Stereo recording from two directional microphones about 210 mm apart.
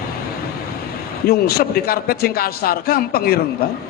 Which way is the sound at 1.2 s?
45° left (ahead or behind).